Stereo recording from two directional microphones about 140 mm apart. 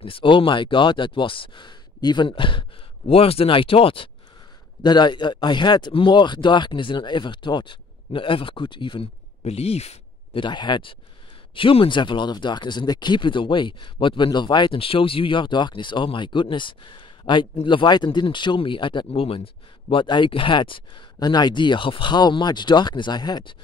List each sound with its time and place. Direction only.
0.0 s speech: 40° left (ahead or behind)
9.4 s speech: 45° left (ahead or behind)
10.4 s speech: 30° left (ahead or behind)